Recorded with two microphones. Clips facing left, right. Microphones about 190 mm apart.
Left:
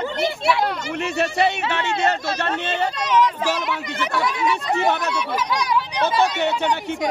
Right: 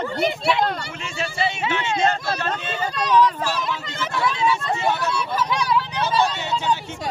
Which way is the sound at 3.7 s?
65° left (ahead or behind).